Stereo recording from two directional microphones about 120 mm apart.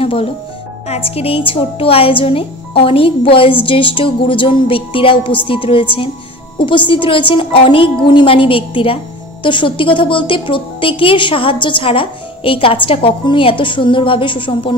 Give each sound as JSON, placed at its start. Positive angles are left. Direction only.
{"t": 0.0, "sound": "music", "side_deg": 50}
{"t": 0.8, "sound": "a woman's voice", "side_deg": 60}